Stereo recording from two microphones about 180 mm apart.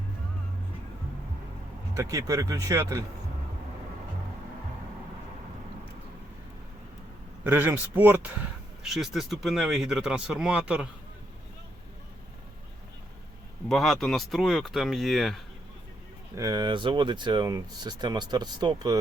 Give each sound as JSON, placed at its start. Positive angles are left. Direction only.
{"t": 2.0, "sound": "speech", "side_deg": -20}
{"t": 7.4, "sound": "speech", "side_deg": -10}
{"t": 13.7, "sound": "speech", "side_deg": 0}
{"t": 16.3, "sound": "speech", "side_deg": -20}